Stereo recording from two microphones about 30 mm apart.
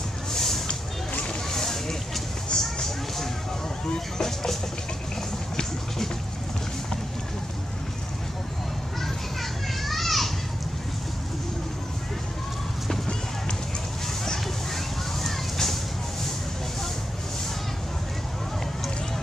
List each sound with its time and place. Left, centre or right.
0.3 s music: centre
1.5 s a sound: centre
2.5 s music: centre
3.9 s vehicle: centre
9.0 s children playing: centre
12.8 s run: centre
15.2 s a sound: centre